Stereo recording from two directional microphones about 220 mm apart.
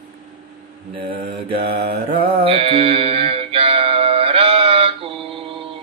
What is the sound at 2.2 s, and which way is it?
Music, 25° right (ahead or behind).